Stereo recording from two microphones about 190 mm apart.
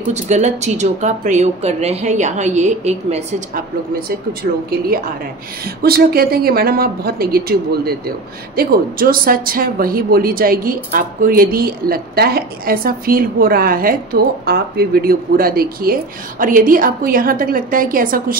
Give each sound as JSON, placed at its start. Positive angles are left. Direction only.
{"t": 0.1, "sound": "speech", "side_deg": -35}
{"t": 4.3, "sound": "speech", "side_deg": -55}